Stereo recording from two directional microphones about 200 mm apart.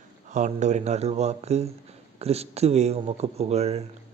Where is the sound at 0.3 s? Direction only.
40° right (ahead or behind).